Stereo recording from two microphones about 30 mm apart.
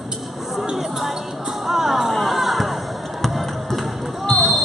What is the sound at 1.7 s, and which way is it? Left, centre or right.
Music, centre.